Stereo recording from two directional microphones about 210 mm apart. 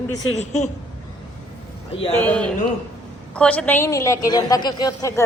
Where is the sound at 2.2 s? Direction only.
5° left (ahead or behind).